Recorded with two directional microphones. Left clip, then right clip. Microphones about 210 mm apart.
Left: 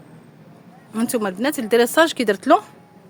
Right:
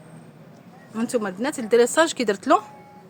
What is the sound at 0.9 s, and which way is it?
A woman's voice, 35° left (ahead or behind).